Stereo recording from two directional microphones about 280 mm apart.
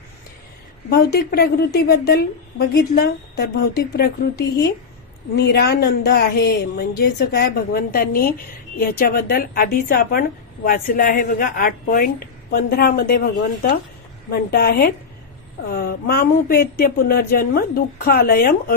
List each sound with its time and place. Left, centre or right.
0.9 s a woman's voice: left